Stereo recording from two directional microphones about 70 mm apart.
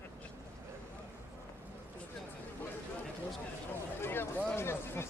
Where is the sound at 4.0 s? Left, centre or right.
Left.